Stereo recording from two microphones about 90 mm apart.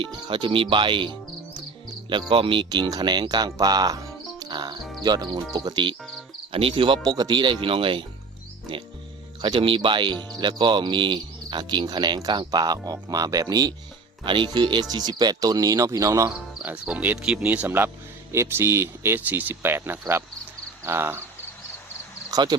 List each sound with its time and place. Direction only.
0.0 s speech: 65° right (ahead or behind)
1.9 s insect: 60° right (ahead or behind)
2.3 s speech: 75° right (ahead or behind)
2.6 s speech: 50° right (ahead or behind)
6.5 s speech: 85° right
7.0 s speech: 50° right (ahead or behind); by 8.0 s 70° right (ahead or behind)
9.4 s speech: 70° right (ahead or behind); by 13.7 s 45° right (ahead or behind)
14.3 s speech: 60° right (ahead or behind); by 16.3 s 35° right (ahead or behind)
16.3 s cricket: 10° right (ahead or behind)
17.2 s speech: 10° right (ahead or behind); by 21.2 s 25° right (ahead or behind)
22.3 s a sound: 50° right (ahead or behind)